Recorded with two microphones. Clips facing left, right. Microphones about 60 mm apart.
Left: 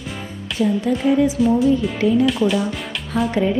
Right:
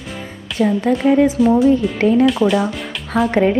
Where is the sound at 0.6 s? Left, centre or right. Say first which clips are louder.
Right 3 dB; right.